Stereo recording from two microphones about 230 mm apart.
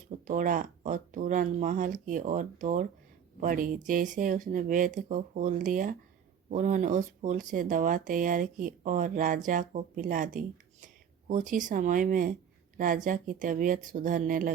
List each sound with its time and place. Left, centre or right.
0.3 s a woman's voice: right